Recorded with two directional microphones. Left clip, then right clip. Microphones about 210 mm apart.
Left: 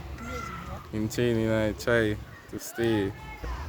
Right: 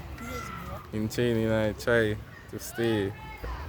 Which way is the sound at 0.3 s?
60° right (ahead or behind).